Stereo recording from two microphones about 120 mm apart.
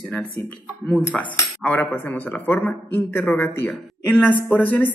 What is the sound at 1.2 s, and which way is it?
A man's voice, 15° left (ahead or behind).